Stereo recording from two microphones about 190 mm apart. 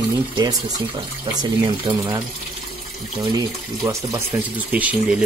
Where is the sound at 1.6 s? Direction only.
20° right (ahead or behind).